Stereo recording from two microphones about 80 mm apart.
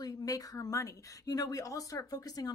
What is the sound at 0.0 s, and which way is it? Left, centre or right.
Speech, left.